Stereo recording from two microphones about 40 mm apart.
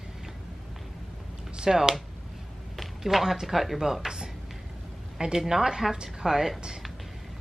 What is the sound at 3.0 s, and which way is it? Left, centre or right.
Speech, centre.